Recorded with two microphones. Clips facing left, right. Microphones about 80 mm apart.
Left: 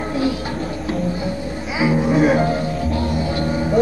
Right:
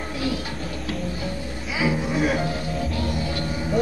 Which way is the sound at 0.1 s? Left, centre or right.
Left.